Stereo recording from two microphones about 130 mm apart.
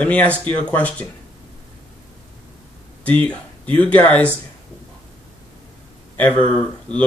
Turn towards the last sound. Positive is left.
turn(degrees=10)  # may be behind; listen again after turning